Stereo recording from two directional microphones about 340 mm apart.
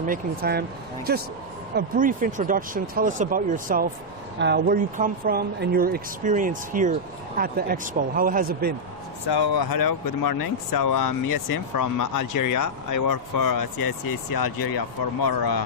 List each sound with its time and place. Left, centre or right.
0.0 s speech: right
1.7 s speech: right
9.3 s speech: left